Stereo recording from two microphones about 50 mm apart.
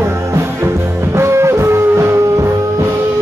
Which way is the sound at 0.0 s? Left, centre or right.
Right.